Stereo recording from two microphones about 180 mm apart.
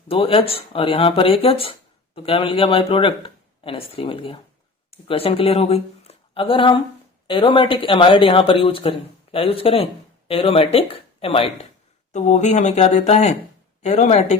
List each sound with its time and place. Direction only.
0.1 s speech: 30° left (ahead or behind)